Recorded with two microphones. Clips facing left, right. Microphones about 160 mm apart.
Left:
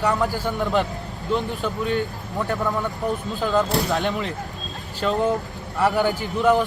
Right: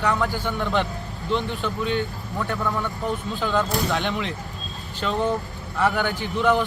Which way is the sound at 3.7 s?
40° left (ahead or behind).